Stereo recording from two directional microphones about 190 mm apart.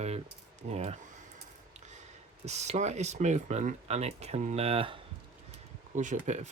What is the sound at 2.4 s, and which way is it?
Speech, 35° right (ahead or behind).